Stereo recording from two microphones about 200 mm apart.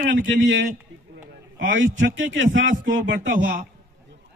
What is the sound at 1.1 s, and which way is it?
A man's voice, 65° right (ahead or behind).